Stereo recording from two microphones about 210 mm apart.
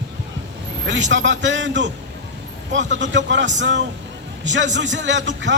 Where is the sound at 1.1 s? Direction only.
60° right (ahead or behind).